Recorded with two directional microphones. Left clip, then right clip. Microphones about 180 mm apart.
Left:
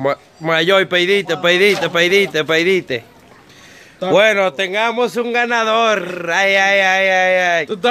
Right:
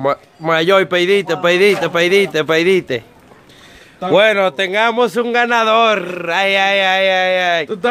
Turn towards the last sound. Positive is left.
turn(degrees=0)  # may be behind; listen again after turning